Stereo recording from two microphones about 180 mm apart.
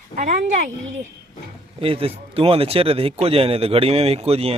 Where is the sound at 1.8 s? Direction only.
30° right (ahead or behind).